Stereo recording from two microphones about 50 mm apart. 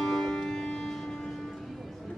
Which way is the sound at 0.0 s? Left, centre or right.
Centre.